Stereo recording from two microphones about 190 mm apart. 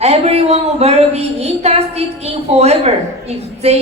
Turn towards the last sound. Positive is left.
turn(degrees=-35)  # may be behind; listen again after turning